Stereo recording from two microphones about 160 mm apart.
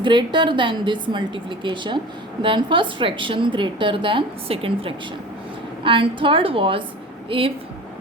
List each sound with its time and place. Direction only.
0.0 s a woman's voice: 30° right (ahead or behind)